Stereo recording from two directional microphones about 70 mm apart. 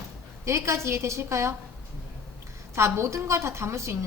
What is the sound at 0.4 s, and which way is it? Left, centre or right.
A woman's voice, right.